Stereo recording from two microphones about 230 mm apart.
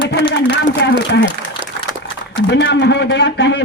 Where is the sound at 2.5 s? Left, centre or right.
Left.